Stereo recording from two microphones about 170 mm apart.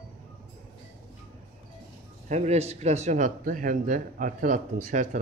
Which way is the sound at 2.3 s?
40° right (ahead or behind).